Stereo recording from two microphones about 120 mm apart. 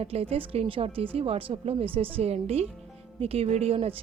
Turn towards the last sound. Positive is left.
turn(degrees=-55)  # may be behind; listen again after turning